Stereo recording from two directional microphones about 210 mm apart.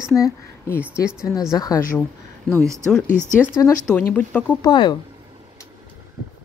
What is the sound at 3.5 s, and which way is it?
Speech, 15° left (ahead or behind).